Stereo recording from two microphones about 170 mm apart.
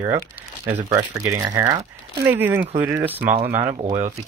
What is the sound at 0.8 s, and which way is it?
Speech, 20° right (ahead or behind).